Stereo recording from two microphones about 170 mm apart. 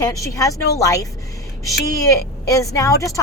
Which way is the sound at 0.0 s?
20° left (ahead or behind).